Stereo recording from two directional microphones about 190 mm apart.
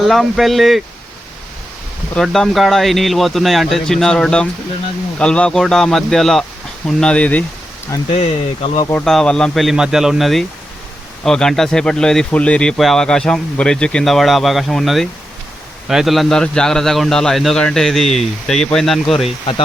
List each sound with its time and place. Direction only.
0.0 s speech: centre (ahead or behind)
2.1 s speech: centre (ahead or behind)
8.1 s speech: 30° left (ahead or behind)
8.9 s speech: 5° left (ahead or behind)